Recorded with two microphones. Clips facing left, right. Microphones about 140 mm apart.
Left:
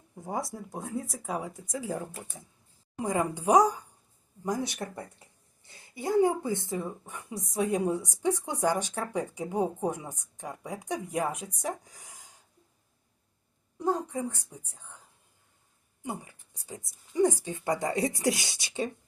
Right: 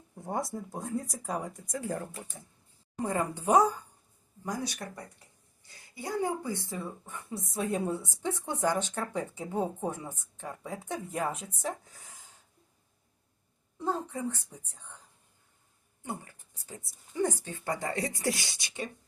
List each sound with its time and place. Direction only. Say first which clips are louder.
0.2 s a woman's voice: even; centre (ahead or behind); by 12.3 s 15° left (ahead or behind)
13.7 s a woman's voice: left 3 dB; 15° left (ahead or behind)
16.0 s a woman's voice: left 2 dB; 15° left (ahead or behind)